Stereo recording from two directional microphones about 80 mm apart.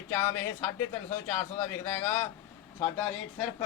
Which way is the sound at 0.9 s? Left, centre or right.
Left.